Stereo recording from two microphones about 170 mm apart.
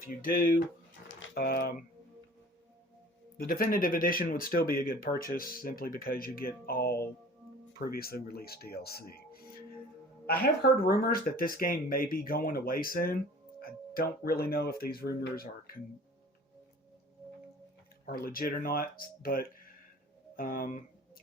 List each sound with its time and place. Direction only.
0.0 s speech: 55° left (ahead or behind)
1.0 s a sound: 80° left
3.3 s speech: 60° left (ahead or behind)
18.0 s speech: 60° left (ahead or behind)